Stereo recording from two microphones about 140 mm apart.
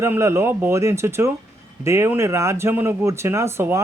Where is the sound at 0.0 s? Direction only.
20° right (ahead or behind).